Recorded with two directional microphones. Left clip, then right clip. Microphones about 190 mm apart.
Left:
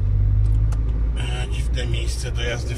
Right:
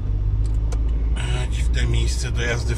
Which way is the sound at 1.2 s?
15° right (ahead or behind).